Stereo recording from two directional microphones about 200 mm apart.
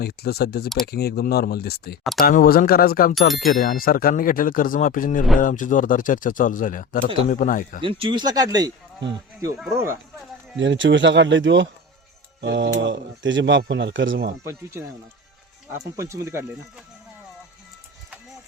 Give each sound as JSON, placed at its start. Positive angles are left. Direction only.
{"t": 0.0, "sound": "speech", "side_deg": 50}
{"t": 7.8, "sound": "speech", "side_deg": -25}
{"t": 9.7, "sound": "speech", "side_deg": -15}
{"t": 10.6, "sound": "speech", "side_deg": -65}
{"t": 14.4, "sound": "speech", "side_deg": -15}